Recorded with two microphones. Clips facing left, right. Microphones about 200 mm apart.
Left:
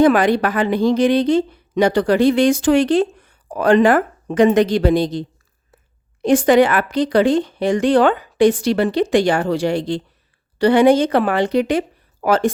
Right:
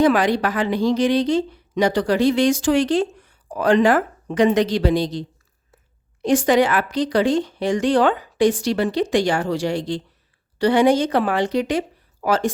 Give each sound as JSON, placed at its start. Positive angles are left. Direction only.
{"t": 0.0, "sound": "a woman's voice", "side_deg": 55}
{"t": 6.2, "sound": "a woman's voice", "side_deg": 55}